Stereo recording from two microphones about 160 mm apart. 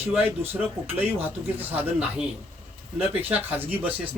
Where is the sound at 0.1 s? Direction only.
10° right (ahead or behind).